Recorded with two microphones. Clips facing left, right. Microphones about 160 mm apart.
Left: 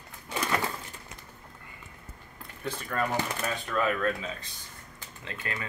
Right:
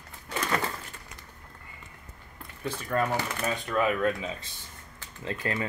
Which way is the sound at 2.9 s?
15° right (ahead or behind).